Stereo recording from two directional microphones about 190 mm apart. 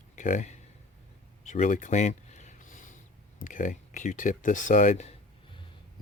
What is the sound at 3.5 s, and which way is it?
Speech, 45° left (ahead or behind).